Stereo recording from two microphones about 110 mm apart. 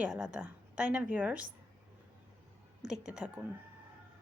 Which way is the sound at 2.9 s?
10° right (ahead or behind).